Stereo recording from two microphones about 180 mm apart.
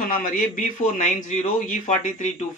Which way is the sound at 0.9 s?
40° left (ahead or behind).